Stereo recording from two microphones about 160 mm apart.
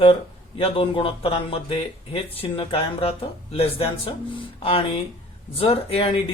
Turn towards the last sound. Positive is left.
turn(degrees=35)  # may be behind; listen again after turning